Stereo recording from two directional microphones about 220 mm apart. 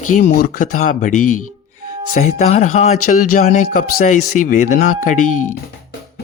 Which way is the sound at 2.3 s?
30° left (ahead or behind).